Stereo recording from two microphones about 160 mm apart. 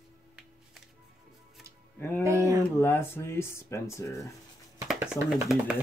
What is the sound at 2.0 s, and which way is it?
Speech, 10° left (ahead or behind).